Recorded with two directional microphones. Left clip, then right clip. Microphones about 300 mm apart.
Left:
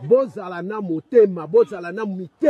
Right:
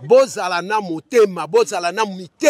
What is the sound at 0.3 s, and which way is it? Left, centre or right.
A man's voice, right.